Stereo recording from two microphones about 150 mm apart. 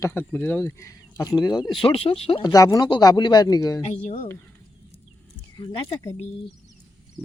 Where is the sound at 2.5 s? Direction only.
25° left (ahead or behind).